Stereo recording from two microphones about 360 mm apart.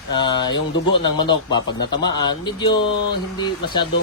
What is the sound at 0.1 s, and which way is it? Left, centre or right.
Speech, centre.